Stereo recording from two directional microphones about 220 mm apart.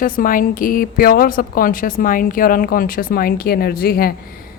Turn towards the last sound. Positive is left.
turn(degrees=45)  # may be behind; listen again after turning